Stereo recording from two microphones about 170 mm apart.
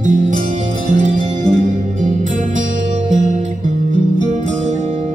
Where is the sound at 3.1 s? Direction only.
45° right (ahead or behind).